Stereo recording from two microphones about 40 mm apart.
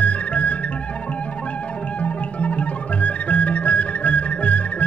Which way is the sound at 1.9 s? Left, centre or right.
Left.